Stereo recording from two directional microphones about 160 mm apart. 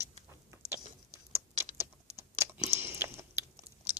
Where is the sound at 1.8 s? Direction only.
15° right (ahead or behind).